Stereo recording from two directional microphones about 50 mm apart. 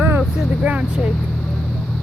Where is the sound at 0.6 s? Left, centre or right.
Right.